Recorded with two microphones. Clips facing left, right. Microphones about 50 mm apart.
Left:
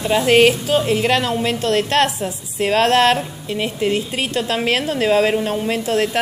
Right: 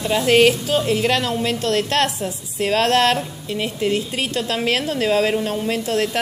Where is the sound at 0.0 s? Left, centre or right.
Centre.